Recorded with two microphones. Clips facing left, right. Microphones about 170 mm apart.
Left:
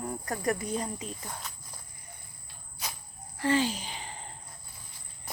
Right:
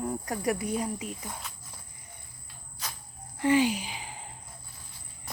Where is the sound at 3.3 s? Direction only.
15° right (ahead or behind).